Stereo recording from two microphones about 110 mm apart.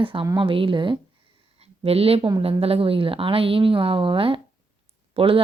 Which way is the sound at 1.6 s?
65° right (ahead or behind).